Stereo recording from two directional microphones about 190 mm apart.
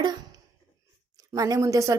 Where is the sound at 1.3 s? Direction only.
15° right (ahead or behind).